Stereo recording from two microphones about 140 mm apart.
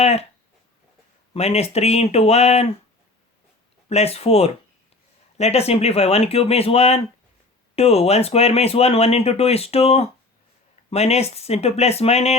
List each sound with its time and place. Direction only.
0.0 s speech: 50° left (ahead or behind)
1.3 s speech: 50° left (ahead or behind)
3.8 s speech: 50° left (ahead or behind)